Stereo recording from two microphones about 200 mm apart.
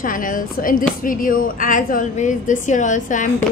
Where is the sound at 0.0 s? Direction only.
40° left (ahead or behind).